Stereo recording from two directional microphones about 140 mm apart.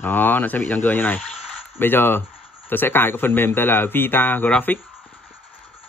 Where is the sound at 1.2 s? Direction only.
Centre (ahead or behind).